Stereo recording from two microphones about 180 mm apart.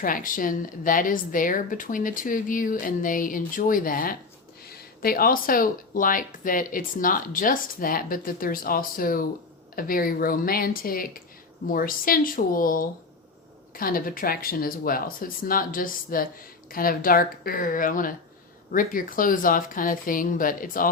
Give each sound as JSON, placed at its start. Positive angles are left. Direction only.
{"t": 0.0, "sound": "speech", "side_deg": 50}